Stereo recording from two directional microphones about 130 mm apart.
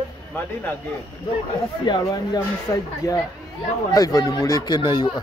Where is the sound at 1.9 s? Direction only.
30° left (ahead or behind).